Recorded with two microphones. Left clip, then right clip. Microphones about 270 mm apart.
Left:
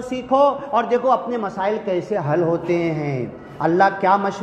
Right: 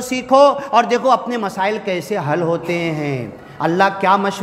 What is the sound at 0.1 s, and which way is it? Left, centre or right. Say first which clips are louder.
A man's voice: right 5 dB; right.